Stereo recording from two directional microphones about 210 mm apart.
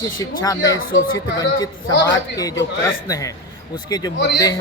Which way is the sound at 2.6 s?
15° left (ahead or behind).